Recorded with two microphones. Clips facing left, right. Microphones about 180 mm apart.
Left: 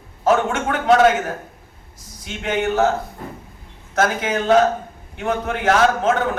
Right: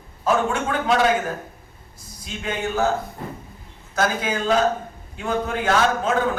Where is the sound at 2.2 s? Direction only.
70° left (ahead or behind).